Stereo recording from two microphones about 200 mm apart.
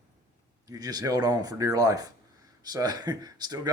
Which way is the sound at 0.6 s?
20° right (ahead or behind).